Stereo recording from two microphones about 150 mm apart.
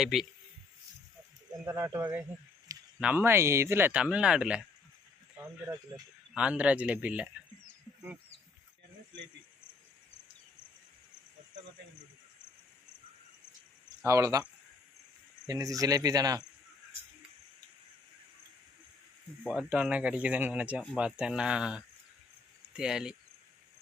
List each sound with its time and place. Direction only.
0.0 s speech: centre (ahead or behind)
1.6 s speech: 15° right (ahead or behind)
14.0 s cricket: 20° right (ahead or behind)
15.4 s cricket: 25° right (ahead or behind)
19.5 s speech: 5° right (ahead or behind)